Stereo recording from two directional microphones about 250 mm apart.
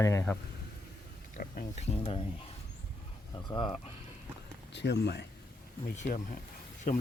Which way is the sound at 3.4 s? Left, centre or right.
Centre.